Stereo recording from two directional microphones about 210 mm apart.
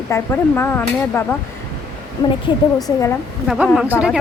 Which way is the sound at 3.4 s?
Centre (ahead or behind).